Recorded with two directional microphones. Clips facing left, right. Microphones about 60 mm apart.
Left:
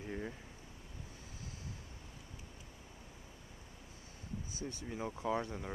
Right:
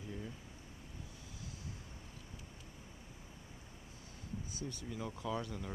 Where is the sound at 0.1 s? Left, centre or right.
Left.